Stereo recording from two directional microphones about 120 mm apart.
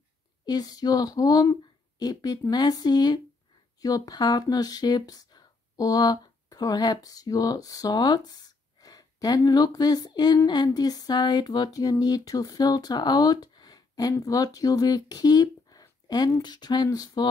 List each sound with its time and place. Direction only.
0.5 s speech: 35° left (ahead or behind)